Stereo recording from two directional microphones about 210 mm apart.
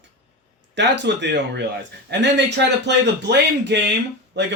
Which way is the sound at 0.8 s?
55° right (ahead or behind).